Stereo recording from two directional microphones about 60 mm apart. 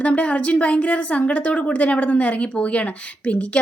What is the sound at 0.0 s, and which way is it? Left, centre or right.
Speech, left.